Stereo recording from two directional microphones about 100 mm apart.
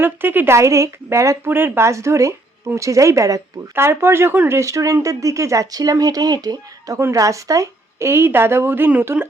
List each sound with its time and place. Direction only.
0.0 s a woman's voice: 20° right (ahead or behind)